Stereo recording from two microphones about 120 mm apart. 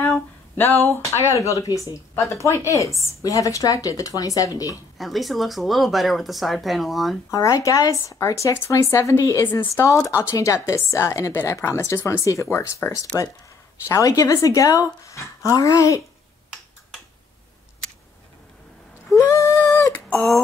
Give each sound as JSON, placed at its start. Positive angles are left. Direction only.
{"t": 0.9, "sound": "speech", "side_deg": 25}
{"t": 4.9, "sound": "speech", "side_deg": 0}
{"t": 7.2, "sound": "speech", "side_deg": 25}
{"t": 19.1, "sound": "a sound", "side_deg": 25}